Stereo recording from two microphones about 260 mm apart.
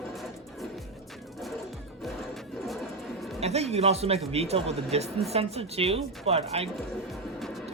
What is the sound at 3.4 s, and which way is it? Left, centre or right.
A man's voice, right.